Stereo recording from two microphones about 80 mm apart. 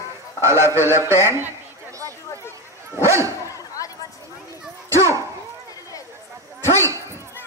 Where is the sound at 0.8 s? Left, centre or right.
Right.